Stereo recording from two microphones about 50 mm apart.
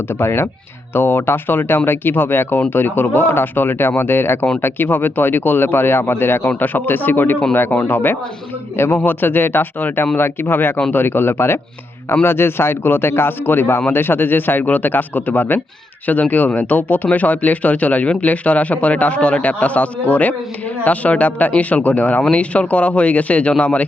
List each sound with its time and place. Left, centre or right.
0.1 s a man's voice: left
8.7 s a man's voice: left